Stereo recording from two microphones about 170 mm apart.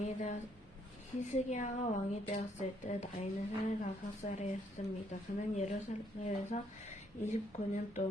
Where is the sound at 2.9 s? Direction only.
45° left (ahead or behind).